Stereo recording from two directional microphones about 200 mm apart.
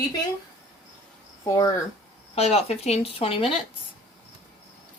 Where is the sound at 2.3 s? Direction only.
30° left (ahead or behind).